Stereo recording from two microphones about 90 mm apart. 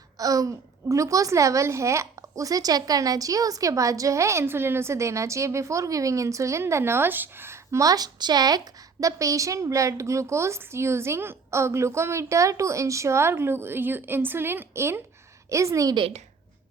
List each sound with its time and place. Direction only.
0.2 s a woman's voice: 40° right (ahead or behind)